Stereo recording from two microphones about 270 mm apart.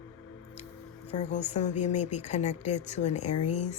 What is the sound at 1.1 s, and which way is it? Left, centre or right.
Speech, left.